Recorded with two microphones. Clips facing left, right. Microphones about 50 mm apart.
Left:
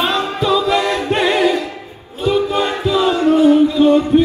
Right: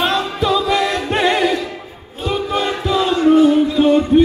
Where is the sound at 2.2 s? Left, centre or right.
Centre.